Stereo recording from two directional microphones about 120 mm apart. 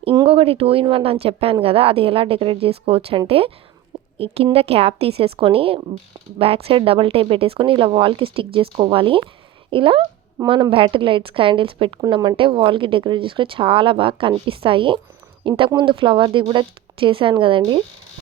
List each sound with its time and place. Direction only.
0.3 s speech: 55° right (ahead or behind)
3.9 s a sound: 50° right (ahead or behind)
4.5 s speech: 55° right (ahead or behind)
12.0 s speech: 35° right (ahead or behind)